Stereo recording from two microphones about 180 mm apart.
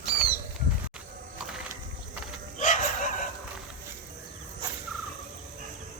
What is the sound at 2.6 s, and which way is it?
Chicken, 45° left (ahead or behind).